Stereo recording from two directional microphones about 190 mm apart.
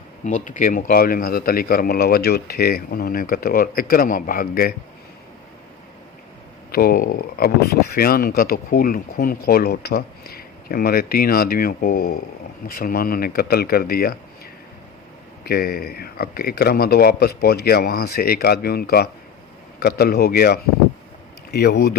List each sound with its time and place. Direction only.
0.3 s speech: 40° left (ahead or behind)
6.7 s speech: 50° left (ahead or behind)
15.4 s a man's voice: 55° left (ahead or behind)